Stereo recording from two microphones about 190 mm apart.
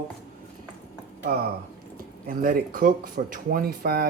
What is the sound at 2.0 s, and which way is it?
Speech, 50° right (ahead or behind).